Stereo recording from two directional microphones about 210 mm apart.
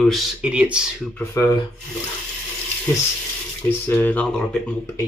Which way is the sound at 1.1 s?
15° left (ahead or behind).